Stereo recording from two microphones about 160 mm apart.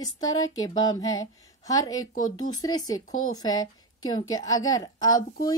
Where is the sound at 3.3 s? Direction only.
25° left (ahead or behind).